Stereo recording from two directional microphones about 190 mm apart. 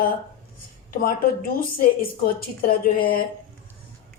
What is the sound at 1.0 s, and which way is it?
Speech, 50° left (ahead or behind).